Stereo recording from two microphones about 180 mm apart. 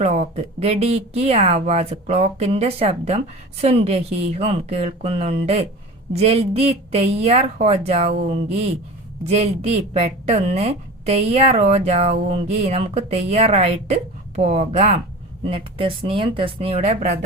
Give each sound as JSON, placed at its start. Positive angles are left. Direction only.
{"t": 0.0, "sound": "a woman's voice", "side_deg": -35}